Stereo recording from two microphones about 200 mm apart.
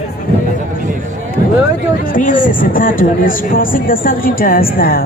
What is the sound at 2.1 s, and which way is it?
Speech, 40° left (ahead or behind).